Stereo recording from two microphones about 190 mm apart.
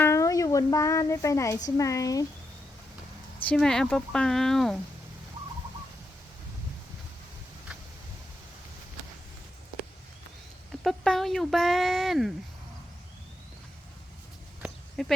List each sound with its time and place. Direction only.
0.0 s speech: 15° left (ahead or behind)
3.5 s speech: 5° left (ahead or behind)
10.7 s speech: centre (ahead or behind)
14.6 s a sound: centre (ahead or behind)